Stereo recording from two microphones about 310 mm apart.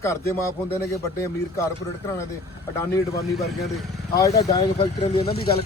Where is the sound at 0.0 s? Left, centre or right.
Centre.